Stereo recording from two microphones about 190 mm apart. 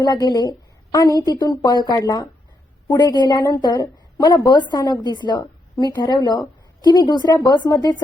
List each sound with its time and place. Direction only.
0.0 s a woman's voice: 20° left (ahead or behind)